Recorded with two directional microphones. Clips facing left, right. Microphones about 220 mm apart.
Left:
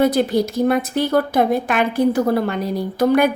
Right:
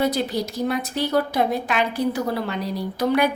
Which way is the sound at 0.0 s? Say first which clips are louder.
Left 6 dB; 50° left (ahead or behind).